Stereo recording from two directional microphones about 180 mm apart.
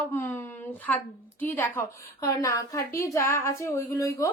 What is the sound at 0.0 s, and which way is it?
A woman's voice, 15° left (ahead or behind).